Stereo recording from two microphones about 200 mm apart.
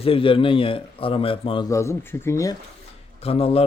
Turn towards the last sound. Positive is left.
turn(degrees=30)  # may be behind; listen again after turning